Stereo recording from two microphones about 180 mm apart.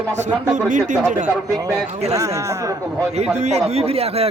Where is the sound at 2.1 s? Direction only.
20° right (ahead or behind).